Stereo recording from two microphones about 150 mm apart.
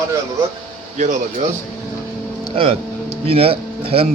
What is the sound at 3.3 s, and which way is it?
Speech, 40° right (ahead or behind).